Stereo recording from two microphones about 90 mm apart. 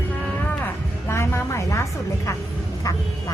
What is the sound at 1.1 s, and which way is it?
Speech, 30° left (ahead or behind).